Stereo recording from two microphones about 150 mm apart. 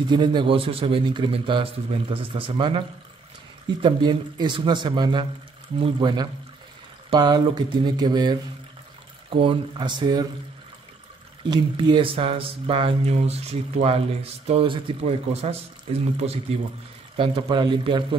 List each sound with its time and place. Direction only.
0.1 s speech: 30° right (ahead or behind)
3.8 s speech: 30° right (ahead or behind)
9.4 s speech: 35° right (ahead or behind)
11.4 s speech: 30° right (ahead or behind)